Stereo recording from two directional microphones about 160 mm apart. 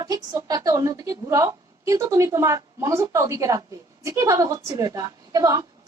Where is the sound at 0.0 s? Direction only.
25° right (ahead or behind).